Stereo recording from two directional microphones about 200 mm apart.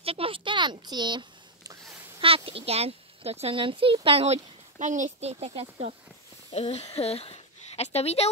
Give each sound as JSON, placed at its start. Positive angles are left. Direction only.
{"t": 0.0, "sound": "a sound", "side_deg": -30}
{"t": 2.1, "sound": "speech", "side_deg": -25}
{"t": 6.5, "sound": "speech", "side_deg": 30}